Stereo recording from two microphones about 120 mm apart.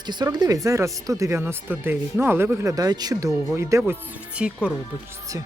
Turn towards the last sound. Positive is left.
turn(degrees=-10)  # may be behind; listen again after turning